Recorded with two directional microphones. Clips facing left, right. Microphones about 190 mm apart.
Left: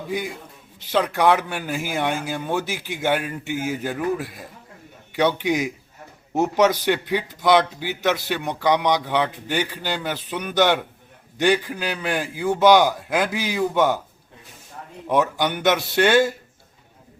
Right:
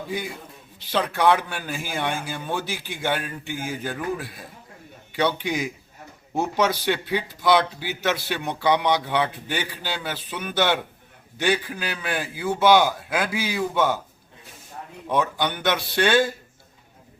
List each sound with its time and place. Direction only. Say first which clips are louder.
0.9 s speech: left 2 dB; 15° left (ahead or behind)
5.1 s speech: left 4 dB; 15° left (ahead or behind)
15.1 s speech: left 3 dB; 10° left (ahead or behind)